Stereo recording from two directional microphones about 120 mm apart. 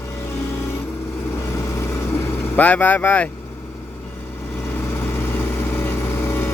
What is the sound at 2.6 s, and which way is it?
Speech, 10° left (ahead or behind).